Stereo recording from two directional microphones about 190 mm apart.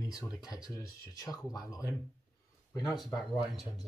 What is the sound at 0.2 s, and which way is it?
Speech, 20° left (ahead or behind).